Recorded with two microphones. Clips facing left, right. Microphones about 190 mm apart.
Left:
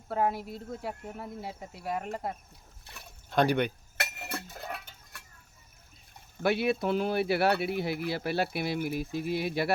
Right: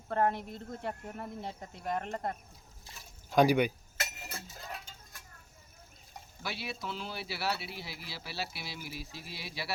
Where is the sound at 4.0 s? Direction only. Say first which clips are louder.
Left 5 dB; 65° left (ahead or behind).